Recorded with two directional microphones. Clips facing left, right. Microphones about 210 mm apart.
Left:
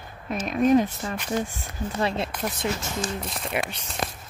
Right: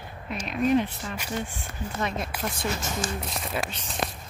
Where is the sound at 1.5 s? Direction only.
30° left (ahead or behind).